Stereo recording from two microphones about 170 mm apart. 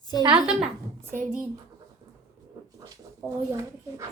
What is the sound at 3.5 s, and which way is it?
Speech, 20° right (ahead or behind).